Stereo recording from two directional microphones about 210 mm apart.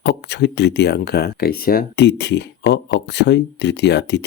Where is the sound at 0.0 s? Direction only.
55° left (ahead or behind).